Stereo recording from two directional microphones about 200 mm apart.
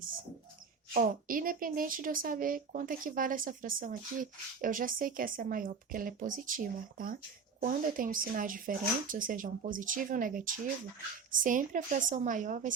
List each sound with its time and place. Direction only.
0.9 s a woman's voice: 45° right (ahead or behind)